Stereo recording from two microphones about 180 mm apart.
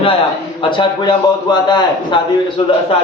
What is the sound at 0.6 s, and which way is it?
A man's voice, 25° left (ahead or behind).